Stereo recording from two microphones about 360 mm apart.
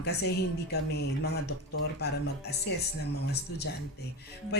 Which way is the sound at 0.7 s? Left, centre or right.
Left.